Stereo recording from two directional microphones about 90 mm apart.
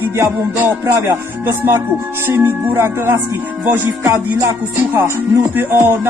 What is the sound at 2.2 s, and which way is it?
Music, 30° right (ahead or behind).